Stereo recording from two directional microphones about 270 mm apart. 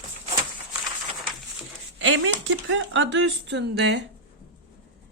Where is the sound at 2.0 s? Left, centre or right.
Right.